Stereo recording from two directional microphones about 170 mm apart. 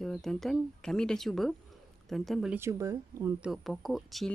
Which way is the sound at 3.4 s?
Centre (ahead or behind).